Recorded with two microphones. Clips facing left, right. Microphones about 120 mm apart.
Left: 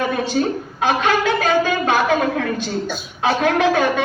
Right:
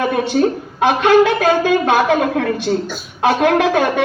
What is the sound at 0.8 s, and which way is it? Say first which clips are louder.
Speech: right 7 dB; 60° right (ahead or behind).